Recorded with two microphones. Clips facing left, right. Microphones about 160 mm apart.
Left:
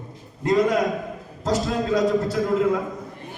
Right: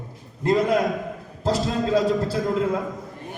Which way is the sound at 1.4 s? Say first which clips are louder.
Even; 30° right (ahead or behind).